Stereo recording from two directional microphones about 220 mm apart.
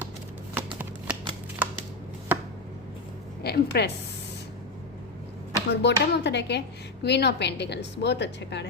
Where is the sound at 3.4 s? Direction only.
45° left (ahead or behind).